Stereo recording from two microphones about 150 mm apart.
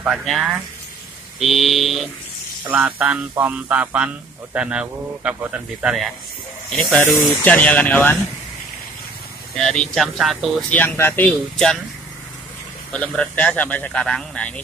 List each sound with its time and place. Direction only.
0.0 s speech: centre (ahead or behind)
2.7 s a man's voice: 10° right (ahead or behind); by 8.2 s 10° left (ahead or behind)
9.6 s speech: 5° left (ahead or behind)
10.7 s a man's voice: 10° left (ahead or behind)
12.9 s a man's voice: 5° left (ahead or behind)